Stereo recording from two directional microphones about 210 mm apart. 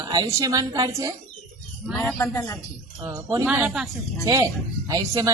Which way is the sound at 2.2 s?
15° left (ahead or behind).